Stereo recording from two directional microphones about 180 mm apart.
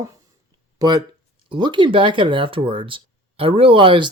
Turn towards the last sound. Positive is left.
turn(degrees=-25)  # may be behind; listen again after turning